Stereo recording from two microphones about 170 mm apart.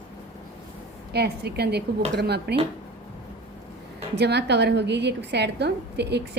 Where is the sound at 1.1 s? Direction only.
70° right (ahead or behind).